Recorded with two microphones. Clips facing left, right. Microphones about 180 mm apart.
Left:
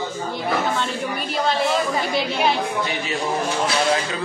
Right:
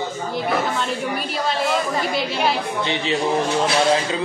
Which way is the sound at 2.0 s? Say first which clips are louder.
Even; centre (ahead or behind).